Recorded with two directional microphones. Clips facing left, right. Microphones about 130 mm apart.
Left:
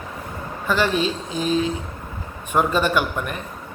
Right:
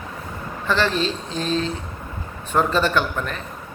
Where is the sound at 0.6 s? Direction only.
10° left (ahead or behind).